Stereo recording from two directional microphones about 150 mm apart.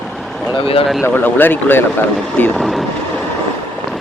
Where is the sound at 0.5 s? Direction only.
40° left (ahead or behind).